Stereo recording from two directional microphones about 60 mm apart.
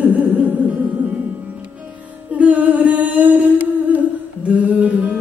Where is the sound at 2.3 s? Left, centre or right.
Right.